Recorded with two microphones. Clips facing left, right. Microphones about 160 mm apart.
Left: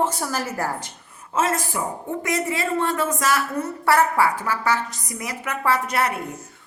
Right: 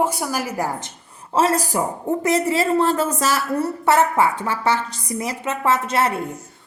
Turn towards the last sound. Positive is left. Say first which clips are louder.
# right 2 dB
turn(degrees=-25)  # may be behind; listen again after turning